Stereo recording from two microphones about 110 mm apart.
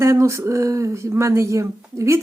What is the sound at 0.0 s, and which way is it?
Speech, 25° right (ahead or behind).